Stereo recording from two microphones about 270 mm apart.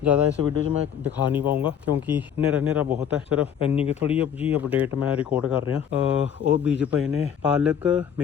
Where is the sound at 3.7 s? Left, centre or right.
Left.